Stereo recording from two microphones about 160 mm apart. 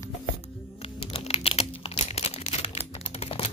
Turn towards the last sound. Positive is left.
turn(degrees=40)  # may be behind; listen again after turning